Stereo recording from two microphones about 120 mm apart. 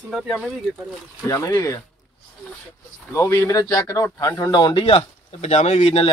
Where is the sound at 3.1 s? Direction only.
20° left (ahead or behind); by 6.0 s 65° left (ahead or behind).